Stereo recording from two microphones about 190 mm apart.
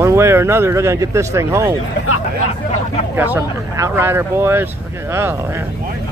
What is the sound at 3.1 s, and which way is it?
Speech, 10° right (ahead or behind).